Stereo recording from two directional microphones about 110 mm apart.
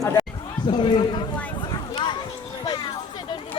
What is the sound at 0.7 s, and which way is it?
Speech, 50° left (ahead or behind).